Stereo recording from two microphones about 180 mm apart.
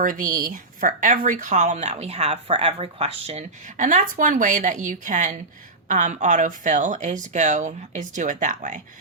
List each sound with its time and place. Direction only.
0.0 s speech: 50° right (ahead or behind)